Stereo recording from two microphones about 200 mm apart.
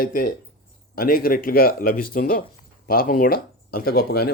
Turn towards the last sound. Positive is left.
turn(degrees=50)  # may be behind; listen again after turning